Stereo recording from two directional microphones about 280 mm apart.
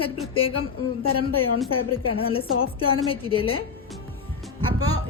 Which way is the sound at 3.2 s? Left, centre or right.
Centre.